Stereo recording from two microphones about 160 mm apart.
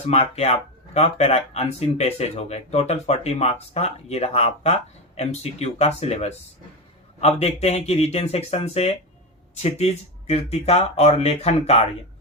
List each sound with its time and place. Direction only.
0.0 s speech: 45° left (ahead or behind)